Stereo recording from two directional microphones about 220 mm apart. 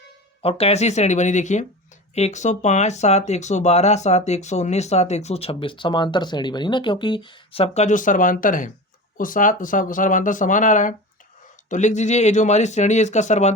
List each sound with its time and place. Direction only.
0.4 s speech: 25° left (ahead or behind)